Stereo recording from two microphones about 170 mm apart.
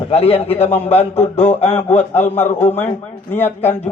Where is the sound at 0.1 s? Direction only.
35° left (ahead or behind).